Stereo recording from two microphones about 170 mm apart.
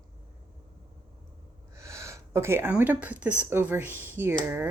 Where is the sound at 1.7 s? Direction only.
15° right (ahead or behind).